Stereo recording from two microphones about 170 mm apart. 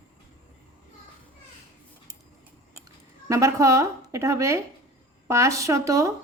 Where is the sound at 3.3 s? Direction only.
20° right (ahead or behind).